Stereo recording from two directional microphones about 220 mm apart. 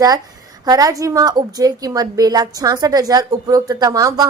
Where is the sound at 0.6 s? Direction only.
15° right (ahead or behind).